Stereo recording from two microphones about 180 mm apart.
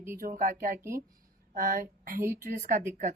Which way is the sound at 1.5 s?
55° right (ahead or behind).